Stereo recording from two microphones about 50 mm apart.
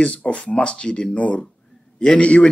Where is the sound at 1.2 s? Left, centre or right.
Left.